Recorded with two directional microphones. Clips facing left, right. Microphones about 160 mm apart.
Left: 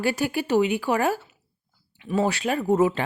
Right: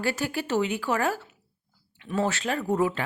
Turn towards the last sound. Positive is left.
turn(degrees=20)  # may be behind; listen again after turning